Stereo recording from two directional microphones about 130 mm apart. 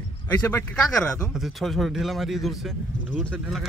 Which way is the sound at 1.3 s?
Centre (ahead or behind).